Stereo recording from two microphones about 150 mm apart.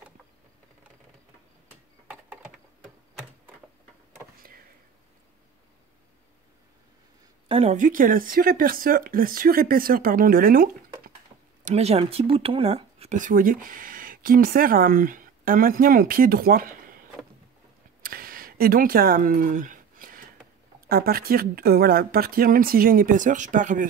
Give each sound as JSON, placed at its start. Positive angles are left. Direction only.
{"t": 7.4, "sound": "a sound", "side_deg": -40}
{"t": 7.7, "sound": "speech", "side_deg": -60}
{"t": 11.6, "sound": "speech", "side_deg": -45}
{"t": 13.2, "sound": "speech", "side_deg": -65}
{"t": 18.0, "sound": "a sound", "side_deg": -80}
{"t": 20.9, "sound": "speech", "side_deg": -90}